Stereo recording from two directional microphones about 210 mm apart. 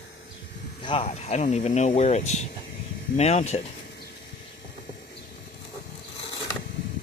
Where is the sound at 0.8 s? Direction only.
25° left (ahead or behind).